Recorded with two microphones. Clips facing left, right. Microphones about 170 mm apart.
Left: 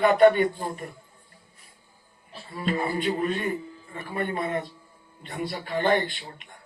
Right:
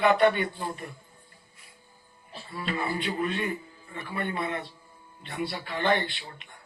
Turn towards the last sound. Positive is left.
turn(degrees=40)  # may be behind; listen again after turning